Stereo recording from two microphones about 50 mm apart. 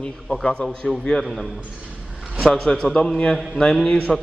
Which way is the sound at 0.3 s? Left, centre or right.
Left.